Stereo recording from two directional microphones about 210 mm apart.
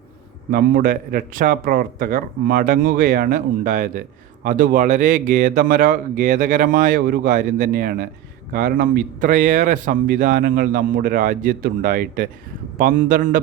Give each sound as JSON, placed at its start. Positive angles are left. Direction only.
{"t": 0.5, "sound": "speech", "side_deg": -45}